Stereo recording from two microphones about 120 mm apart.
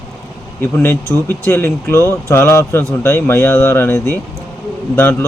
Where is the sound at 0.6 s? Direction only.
20° left (ahead or behind).